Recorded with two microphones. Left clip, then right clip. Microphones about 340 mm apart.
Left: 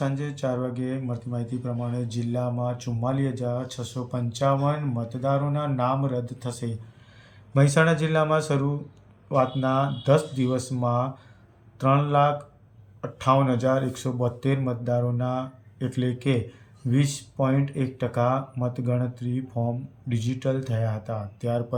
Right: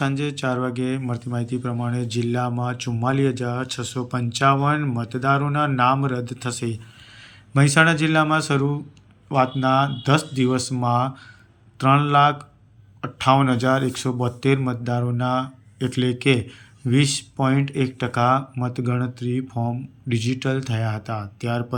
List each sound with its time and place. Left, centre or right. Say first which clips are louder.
0.2 s speech: right 4 dB; centre
3.4 s speech: right 3 dB; centre
4.1 s a man's voice: right 5 dB; centre